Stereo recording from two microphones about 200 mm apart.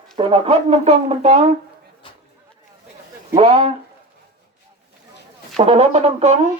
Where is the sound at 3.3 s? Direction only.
30° right (ahead or behind).